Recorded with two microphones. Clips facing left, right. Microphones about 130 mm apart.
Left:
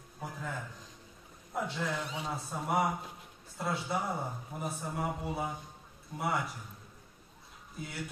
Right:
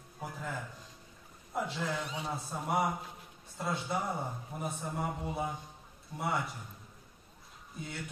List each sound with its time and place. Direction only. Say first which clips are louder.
0.2 s a sound: even; centre (ahead or behind)
1.5 s a man's voice: even; centre (ahead or behind)
7.8 s a man's voice: left 1 dB; centre (ahead or behind)